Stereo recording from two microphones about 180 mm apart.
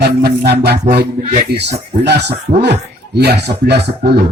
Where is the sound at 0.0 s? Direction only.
65° right (ahead or behind).